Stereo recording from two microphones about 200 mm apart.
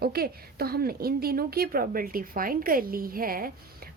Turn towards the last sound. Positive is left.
turn(degrees=-45)  # may be behind; listen again after turning